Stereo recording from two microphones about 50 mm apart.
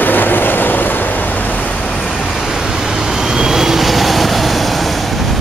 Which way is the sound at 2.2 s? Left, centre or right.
Centre.